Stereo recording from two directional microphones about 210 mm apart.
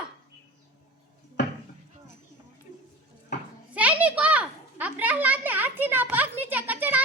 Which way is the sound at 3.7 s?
5° right (ahead or behind).